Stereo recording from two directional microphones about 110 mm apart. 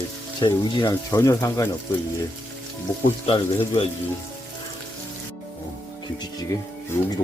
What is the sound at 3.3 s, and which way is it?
Speech, 60° left (ahead or behind).